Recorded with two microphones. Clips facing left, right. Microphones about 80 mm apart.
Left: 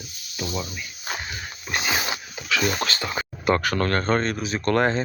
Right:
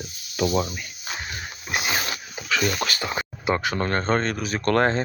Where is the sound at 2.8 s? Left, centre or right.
Centre.